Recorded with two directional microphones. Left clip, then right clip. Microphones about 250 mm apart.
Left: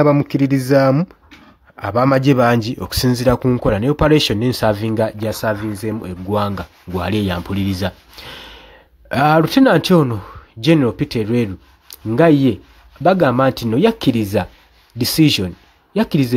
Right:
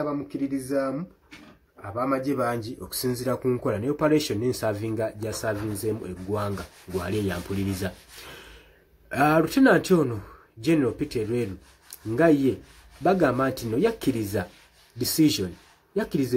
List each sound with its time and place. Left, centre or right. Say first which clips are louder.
0.0 s speech: left 15 dB; left